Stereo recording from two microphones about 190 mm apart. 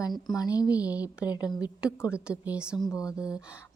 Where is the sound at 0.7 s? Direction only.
5° right (ahead or behind).